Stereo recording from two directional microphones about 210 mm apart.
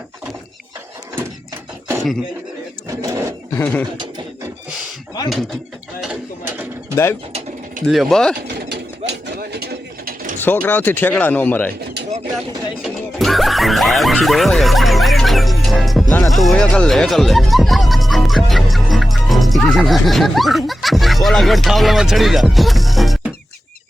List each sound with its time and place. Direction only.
2.9 s a sound: 15° right (ahead or behind)
3.6 s speech: 5° left (ahead or behind)
6.9 s speech: 10° left (ahead or behind)
7.9 s speech: centre (ahead or behind)
8.7 s a sound: 55° right (ahead or behind)
10.4 s speech: 10° left (ahead or behind)
12.8 s speech: centre (ahead or behind)